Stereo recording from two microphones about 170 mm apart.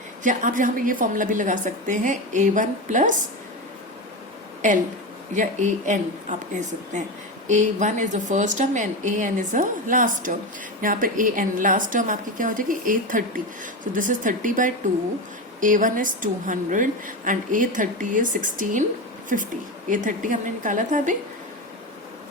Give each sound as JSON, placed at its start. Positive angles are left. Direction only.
{"t": 0.2, "sound": "a woman's voice", "side_deg": -50}
{"t": 5.3, "sound": "a woman's voice", "side_deg": -45}